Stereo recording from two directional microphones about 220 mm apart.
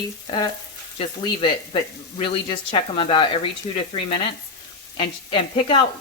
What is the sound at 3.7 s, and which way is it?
Frying, 30° left (ahead or behind).